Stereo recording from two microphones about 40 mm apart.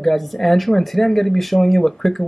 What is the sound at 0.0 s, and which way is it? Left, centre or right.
Speech, centre.